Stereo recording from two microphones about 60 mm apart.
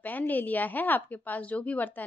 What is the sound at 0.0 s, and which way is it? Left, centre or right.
A woman's voice, left.